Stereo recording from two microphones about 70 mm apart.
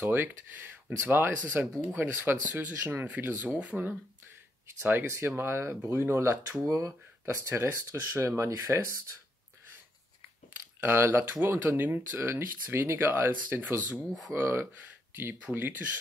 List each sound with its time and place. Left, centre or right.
0.0 s speech: right
4.8 s speech: right
10.8 s speech: right